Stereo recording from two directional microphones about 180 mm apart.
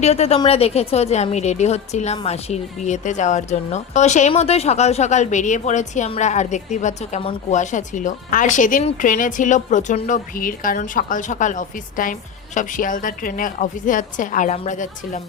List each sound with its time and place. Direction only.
0.0 s speech: 35° left (ahead or behind)